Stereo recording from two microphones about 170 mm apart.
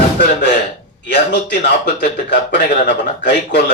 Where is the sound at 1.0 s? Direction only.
90° left.